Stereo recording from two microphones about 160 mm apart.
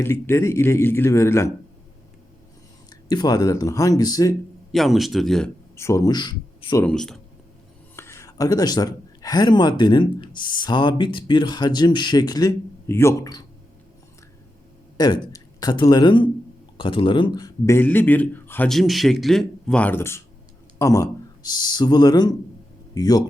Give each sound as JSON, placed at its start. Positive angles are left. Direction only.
{"t": 0.0, "sound": "speech", "side_deg": 15}
{"t": 2.9, "sound": "speech", "side_deg": 25}
{"t": 4.7, "sound": "a man's voice", "side_deg": 0}
{"t": 5.7, "sound": "speech", "side_deg": 20}
{"t": 6.8, "sound": "a man's voice", "side_deg": 5}
{"t": 7.9, "sound": "speech", "side_deg": 15}
{"t": 14.9, "sound": "speech", "side_deg": 25}
{"t": 17.7, "sound": "speech", "side_deg": 10}
{"t": 18.7, "sound": "a man's voice", "side_deg": 0}